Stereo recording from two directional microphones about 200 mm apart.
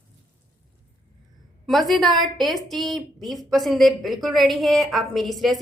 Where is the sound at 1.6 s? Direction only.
Centre (ahead or behind).